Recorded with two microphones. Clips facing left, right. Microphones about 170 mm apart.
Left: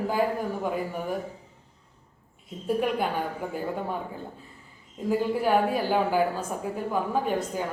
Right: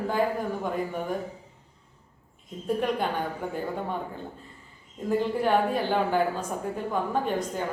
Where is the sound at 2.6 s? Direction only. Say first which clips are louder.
Left 1 dB; 5° left (ahead or behind).